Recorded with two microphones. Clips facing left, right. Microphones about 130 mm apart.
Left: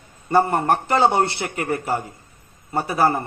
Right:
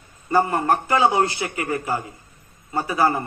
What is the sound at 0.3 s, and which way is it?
A man's voice, 30° left (ahead or behind).